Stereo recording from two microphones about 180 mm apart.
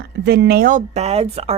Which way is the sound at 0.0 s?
65° right (ahead or behind).